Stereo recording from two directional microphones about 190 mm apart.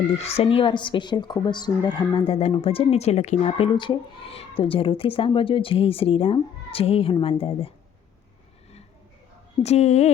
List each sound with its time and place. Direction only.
0.2 s a woman's voice: 30° left (ahead or behind)
9.6 s speech: 35° left (ahead or behind)